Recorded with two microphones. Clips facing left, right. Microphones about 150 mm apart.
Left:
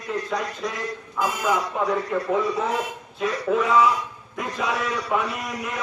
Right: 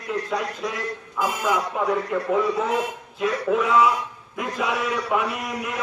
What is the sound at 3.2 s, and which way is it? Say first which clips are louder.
A man's voice: right 1 dB; 5° right (ahead or behind).